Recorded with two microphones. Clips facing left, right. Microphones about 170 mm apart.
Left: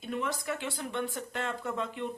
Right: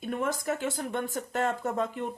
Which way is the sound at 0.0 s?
50° right (ahead or behind).